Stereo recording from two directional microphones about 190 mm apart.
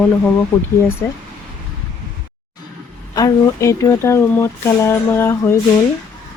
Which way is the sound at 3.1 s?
15° left (ahead or behind).